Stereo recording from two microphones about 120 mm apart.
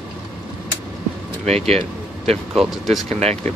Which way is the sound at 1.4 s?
65° right (ahead or behind).